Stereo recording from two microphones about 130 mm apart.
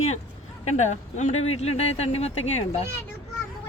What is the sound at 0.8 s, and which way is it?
Speech, 65° left (ahead or behind).